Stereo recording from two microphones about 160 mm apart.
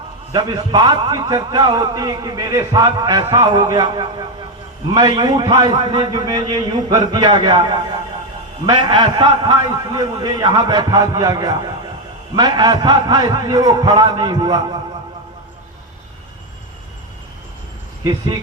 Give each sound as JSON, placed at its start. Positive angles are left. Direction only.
{"t": 0.3, "sound": "a man's voice", "side_deg": -25}
{"t": 8.6, "sound": "a man's voice", "side_deg": -30}